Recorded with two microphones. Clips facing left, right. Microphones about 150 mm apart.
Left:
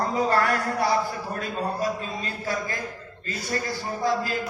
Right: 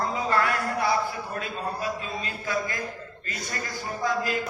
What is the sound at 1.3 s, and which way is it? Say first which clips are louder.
A man's voice: left 5 dB; 40° left (ahead or behind).